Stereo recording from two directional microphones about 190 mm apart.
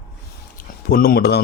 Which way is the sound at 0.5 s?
50° left (ahead or behind).